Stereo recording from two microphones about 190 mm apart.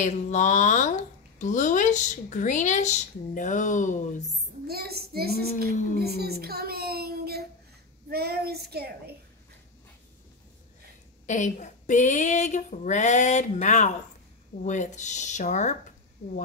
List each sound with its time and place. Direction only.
0.0 s speech: 40° left (ahead or behind)
4.6 s a child's voice: 55° right (ahead or behind)
11.2 s speech: 40° left (ahead or behind)